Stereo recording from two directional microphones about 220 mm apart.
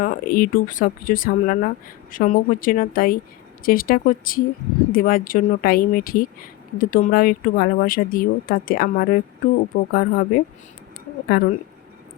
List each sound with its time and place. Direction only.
0.0 s speech: 40° left (ahead or behind)